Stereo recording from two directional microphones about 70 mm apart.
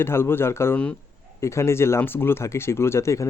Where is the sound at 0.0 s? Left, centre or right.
Left.